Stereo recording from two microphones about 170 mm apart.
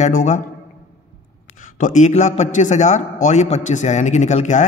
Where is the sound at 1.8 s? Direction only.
45° left (ahead or behind).